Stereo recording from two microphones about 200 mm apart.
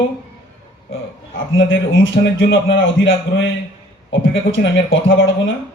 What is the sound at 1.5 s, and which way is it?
A man's voice, 70° left (ahead or behind).